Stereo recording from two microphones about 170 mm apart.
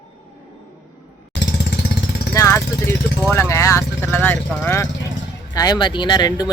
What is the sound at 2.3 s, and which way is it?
Speech, 15° left (ahead or behind).